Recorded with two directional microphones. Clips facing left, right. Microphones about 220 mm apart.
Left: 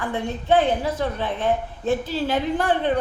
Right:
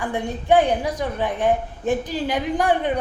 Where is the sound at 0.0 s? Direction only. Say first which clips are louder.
Right 1 dB; 15° right (ahead or behind).